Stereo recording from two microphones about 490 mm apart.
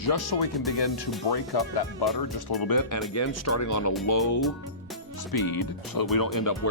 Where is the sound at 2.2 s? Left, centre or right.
Left.